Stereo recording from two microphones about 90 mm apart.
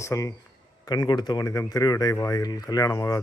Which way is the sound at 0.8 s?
55° left (ahead or behind).